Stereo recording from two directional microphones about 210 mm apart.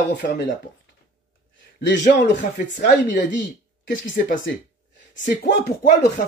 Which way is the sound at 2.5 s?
40° left (ahead or behind).